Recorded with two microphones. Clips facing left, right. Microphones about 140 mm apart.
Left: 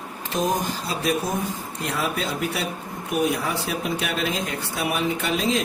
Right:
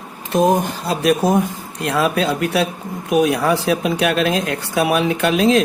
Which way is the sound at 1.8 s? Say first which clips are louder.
Right 9 dB; 80° right.